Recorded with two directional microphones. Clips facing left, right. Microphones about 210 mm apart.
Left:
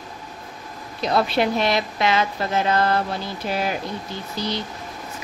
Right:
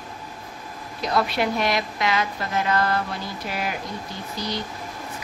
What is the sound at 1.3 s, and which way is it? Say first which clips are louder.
Speech: left 3 dB; 25° left (ahead or behind).